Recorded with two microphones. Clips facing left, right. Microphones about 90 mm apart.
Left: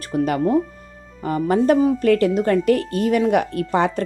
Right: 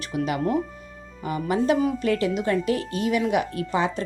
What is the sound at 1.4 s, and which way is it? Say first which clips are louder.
Speech: left 6 dB; 45° left (ahead or behind).